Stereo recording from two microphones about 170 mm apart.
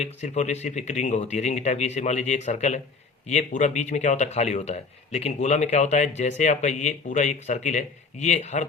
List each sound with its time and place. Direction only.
0.0 s speech: 40° left (ahead or behind)